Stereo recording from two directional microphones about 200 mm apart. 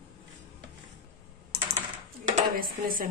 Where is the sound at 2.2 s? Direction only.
40° right (ahead or behind).